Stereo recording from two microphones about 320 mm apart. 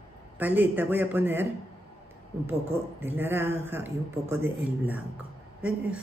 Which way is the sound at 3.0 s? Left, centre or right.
Centre.